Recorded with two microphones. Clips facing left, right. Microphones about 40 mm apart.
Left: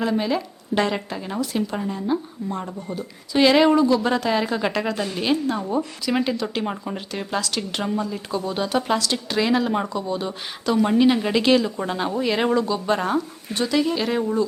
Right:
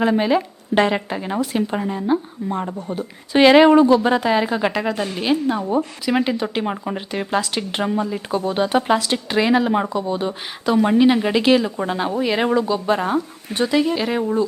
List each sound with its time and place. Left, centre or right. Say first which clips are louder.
0.0 s speech: right 5 dB; right
2.9 s speech: right 4 dB; right
4.0 s speech: right 4 dB; centre
13.5 s speech: right 3 dB; centre